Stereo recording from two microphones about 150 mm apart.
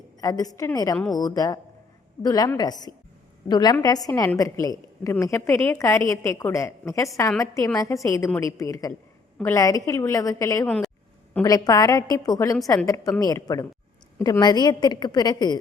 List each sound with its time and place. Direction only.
0.2 s a woman's voice: 25° left (ahead or behind)
10.7 s speech: centre (ahead or behind)
11.4 s a woman's voice: 25° left (ahead or behind)